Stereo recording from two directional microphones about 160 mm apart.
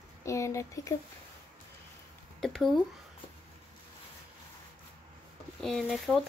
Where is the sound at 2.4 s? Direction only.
Centre (ahead or behind).